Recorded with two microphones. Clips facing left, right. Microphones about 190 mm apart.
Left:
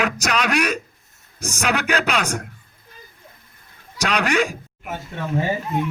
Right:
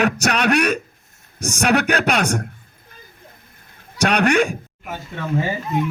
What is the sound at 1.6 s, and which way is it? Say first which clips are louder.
Speech: right 4 dB; 60° right (ahead or behind).